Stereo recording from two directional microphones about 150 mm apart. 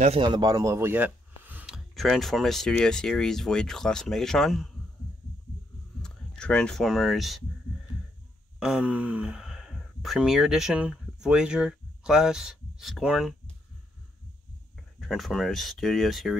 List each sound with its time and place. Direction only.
0.2 s speech: 30° right (ahead or behind); by 1.8 s 10° right (ahead or behind)
2.0 s speech: centre (ahead or behind)
6.0 s speech: 5° left (ahead or behind)
8.5 s speech: 5° right (ahead or behind)
15.0 s speech: centre (ahead or behind)